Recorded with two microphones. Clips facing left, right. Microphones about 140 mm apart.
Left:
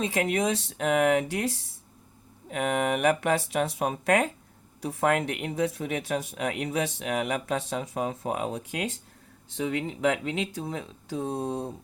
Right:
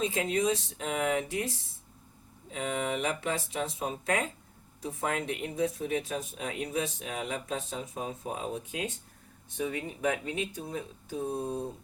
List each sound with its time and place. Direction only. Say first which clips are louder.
0.0 s speech: left 2 dB; 70° left (ahead or behind)
9.5 s speech: left 4 dB; 90° left